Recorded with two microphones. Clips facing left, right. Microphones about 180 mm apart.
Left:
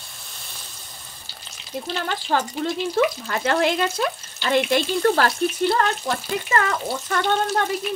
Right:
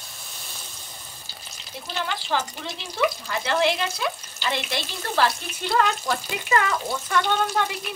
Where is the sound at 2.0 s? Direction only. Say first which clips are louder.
Left 2 dB; 50° left (ahead or behind).